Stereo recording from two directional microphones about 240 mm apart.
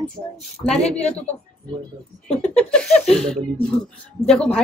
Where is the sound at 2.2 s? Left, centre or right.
Centre.